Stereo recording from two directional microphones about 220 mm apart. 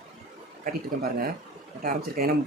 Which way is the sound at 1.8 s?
40° right (ahead or behind).